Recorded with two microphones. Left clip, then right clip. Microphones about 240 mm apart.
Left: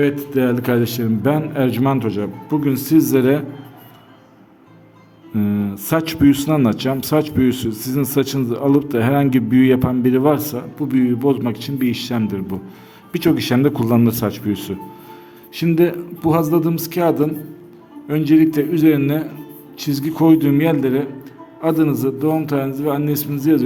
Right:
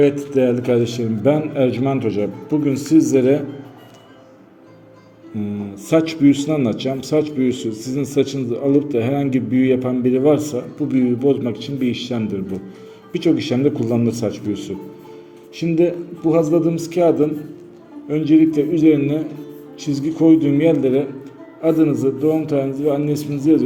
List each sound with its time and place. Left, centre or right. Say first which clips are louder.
0.0 s speech: right 2 dB; left
5.4 s speech: left 5 dB; left